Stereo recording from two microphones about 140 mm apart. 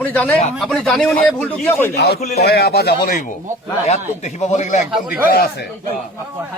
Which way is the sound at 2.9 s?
90° left.